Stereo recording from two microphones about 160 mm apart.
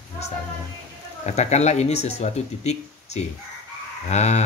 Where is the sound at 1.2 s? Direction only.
45° left (ahead or behind).